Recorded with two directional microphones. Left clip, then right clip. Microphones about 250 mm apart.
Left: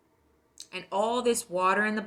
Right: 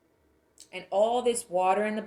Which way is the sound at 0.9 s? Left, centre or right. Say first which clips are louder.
Right 2 dB; left.